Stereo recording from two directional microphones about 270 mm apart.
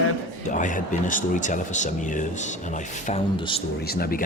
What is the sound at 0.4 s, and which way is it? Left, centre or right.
Speech, left.